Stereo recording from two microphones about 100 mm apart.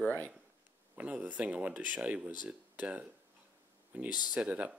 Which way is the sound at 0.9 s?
15° right (ahead or behind).